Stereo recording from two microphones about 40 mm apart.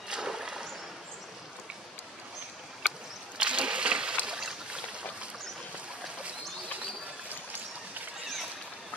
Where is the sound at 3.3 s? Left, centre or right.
Right.